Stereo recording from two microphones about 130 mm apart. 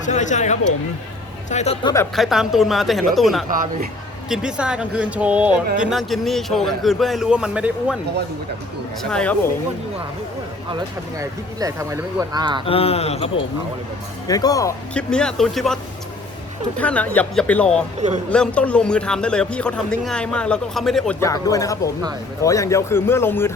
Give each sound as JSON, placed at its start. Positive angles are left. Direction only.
{"t": 0.0, "sound": "a man's voice", "side_deg": 70}
{"t": 1.8, "sound": "a man's voice", "side_deg": 25}
{"t": 2.1, "sound": "a man's voice", "side_deg": 0}
{"t": 9.0, "sound": "speech", "side_deg": 10}
{"t": 11.2, "sound": "speech", "side_deg": -25}
{"t": 12.6, "sound": "speech", "side_deg": 50}
{"t": 14.3, "sound": "a man's voice", "side_deg": 30}
{"t": 14.9, "sound": "a man's voice", "side_deg": 5}
{"t": 21.2, "sound": "a man's voice", "side_deg": 25}